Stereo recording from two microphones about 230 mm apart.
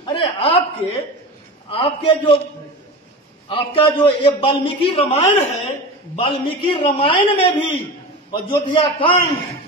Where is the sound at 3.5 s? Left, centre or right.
Left.